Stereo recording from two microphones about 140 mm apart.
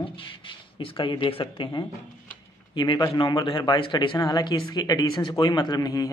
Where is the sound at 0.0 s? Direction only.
40° left (ahead or behind).